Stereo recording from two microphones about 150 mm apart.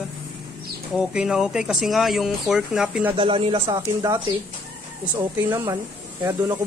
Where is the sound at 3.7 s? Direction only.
25° right (ahead or behind).